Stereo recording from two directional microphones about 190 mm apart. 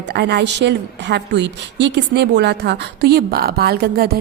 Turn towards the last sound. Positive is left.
turn(degrees=-50)  # may be behind; listen again after turning